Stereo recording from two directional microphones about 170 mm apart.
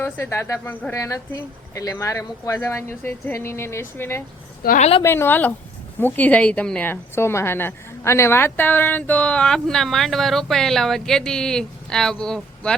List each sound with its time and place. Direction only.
0.0 s a woman's voice: 15° left (ahead or behind)
4.8 s a woman's voice: 35° left (ahead or behind)
5.0 s a woman's voice: 15° left (ahead or behind)